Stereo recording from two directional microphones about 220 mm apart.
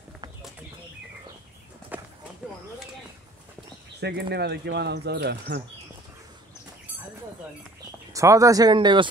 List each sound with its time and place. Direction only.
1.9 s horse: 5° right (ahead or behind)
4.0 s speech: 50° right (ahead or behind)
8.1 s speech: 15° right (ahead or behind)